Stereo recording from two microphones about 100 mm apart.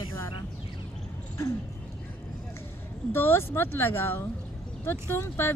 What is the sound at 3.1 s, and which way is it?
Speech, 20° left (ahead or behind).